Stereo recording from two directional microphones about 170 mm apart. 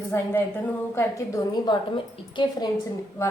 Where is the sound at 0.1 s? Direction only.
15° left (ahead or behind).